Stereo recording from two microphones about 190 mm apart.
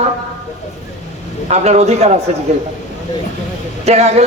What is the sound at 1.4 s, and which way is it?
Speech, 35° right (ahead or behind).